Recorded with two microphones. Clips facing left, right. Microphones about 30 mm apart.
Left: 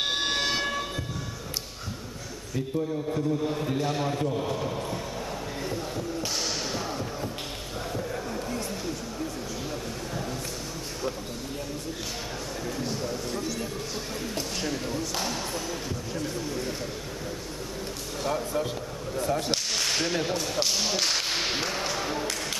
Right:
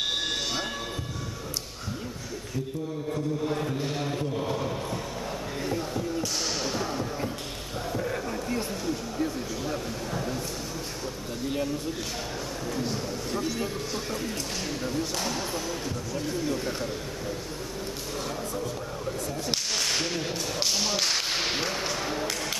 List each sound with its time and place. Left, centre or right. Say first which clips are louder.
0.0 s train: left 2 dB; left
3.1 s a man's voice: left 1 dB; centre
5.6 s a sound: right 4 dB; centre
8.0 s a sound: right 2 dB; centre
9.7 s a sound: right 2 dB; centre
12.6 s speech: even; centre
14.7 s a man's voice: even; centre
18.3 s speech: left 4 dB; left
19.5 s whip: left 1 dB; centre
20.2 s speech: left 3 dB; centre